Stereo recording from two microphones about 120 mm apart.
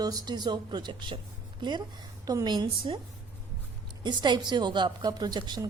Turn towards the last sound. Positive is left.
turn(degrees=-35)  # may be behind; listen again after turning